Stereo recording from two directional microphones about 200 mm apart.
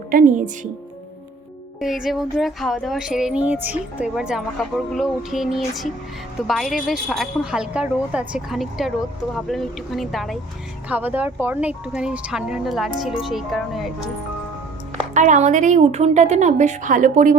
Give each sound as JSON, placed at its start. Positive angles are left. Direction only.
{"t": 0.1, "sound": "a woman's voice", "side_deg": -40}
{"t": 1.8, "sound": "speech", "side_deg": 0}
{"t": 15.1, "sound": "a woman's voice", "side_deg": -35}